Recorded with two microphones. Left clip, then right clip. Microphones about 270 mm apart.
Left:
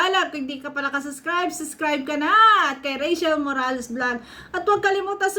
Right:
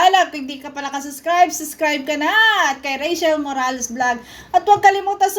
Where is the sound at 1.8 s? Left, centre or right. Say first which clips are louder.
Right 5 dB; right.